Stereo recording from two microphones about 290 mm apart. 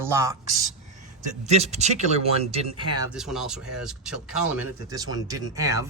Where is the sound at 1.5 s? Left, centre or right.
Right.